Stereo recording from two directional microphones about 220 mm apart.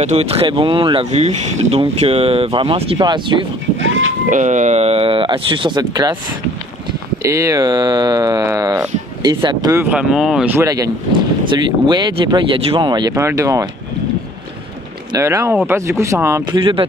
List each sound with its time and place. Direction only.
0.0 s speech: 30° right (ahead or behind)
3.8 s boat: 60° right (ahead or behind)
4.3 s speech: 35° right (ahead or behind); by 6.1 s 20° right (ahead or behind)
7.2 s speech: 15° right (ahead or behind)
15.1 s speech: 15° right (ahead or behind)